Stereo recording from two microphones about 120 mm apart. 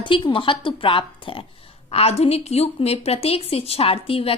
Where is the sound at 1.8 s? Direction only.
55° left (ahead or behind).